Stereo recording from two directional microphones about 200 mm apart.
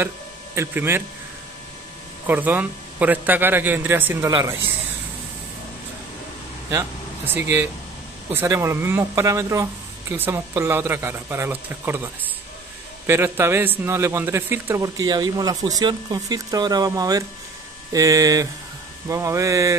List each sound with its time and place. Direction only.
0.6 s a man's voice: 10° right (ahead or behind)
2.2 s a man's voice: 10° right (ahead or behind)
7.3 s a man's voice: 10° right (ahead or behind)